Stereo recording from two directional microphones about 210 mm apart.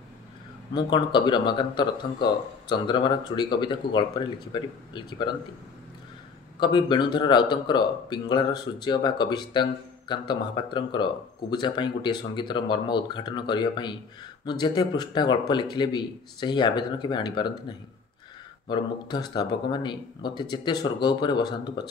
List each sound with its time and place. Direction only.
0.7 s speech: 20° left (ahead or behind)
6.6 s speech: 20° left (ahead or behind)